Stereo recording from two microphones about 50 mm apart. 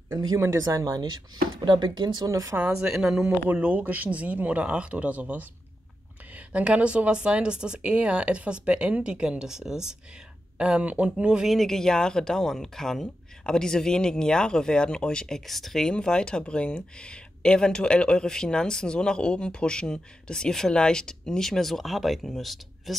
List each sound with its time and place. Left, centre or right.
0.1 s speech: right
2.7 s speech: centre
3.5 s a woman's voice: right
3.8 s a woman's voice: right; by 9.9 s centre
10.8 s a woman's voice: right
11.4 s speech: centre
15.9 s speech: centre